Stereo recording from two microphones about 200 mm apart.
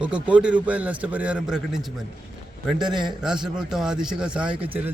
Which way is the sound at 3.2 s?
5° right (ahead or behind).